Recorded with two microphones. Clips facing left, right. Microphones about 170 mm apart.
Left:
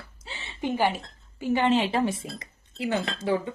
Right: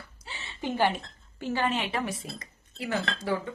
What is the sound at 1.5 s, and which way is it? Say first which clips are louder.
Speech: left 6 dB; 25° left (ahead or behind).